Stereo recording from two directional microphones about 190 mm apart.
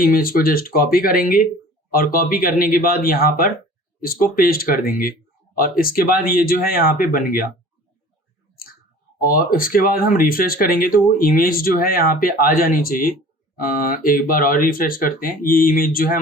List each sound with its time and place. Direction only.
0.0 s speech: 50° left (ahead or behind)
9.2 s speech: 45° left (ahead or behind)